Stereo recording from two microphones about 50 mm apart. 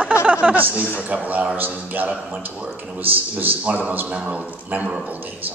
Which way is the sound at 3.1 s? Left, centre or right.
Right.